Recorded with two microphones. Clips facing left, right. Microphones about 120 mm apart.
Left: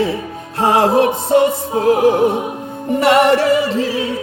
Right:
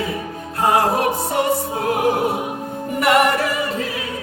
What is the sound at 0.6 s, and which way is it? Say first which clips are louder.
Music: left 4 dB; 25° left (ahead or behind).